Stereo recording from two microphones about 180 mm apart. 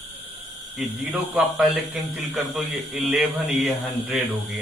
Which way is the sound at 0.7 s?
Centre (ahead or behind).